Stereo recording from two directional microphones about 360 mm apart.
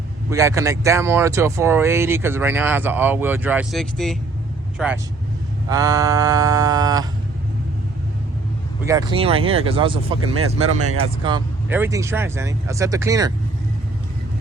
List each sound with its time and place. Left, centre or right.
0.3 s speech: centre
8.9 s speech: centre
10.3 s speech: right
11.2 s speech: centre